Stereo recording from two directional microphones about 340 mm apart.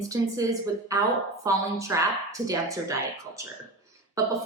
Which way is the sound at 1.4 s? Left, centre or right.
Centre.